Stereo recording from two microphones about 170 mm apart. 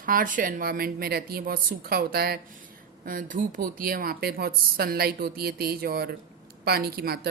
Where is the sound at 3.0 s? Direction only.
55° right (ahead or behind).